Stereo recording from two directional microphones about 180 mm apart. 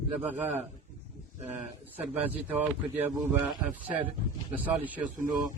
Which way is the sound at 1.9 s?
10° right (ahead or behind).